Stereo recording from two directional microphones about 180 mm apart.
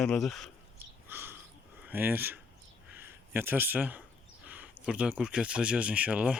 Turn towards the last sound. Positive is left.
turn(degrees=-5)  # may be behind; listen again after turning